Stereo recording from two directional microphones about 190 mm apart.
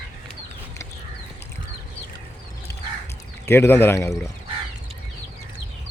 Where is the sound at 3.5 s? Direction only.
10° left (ahead or behind).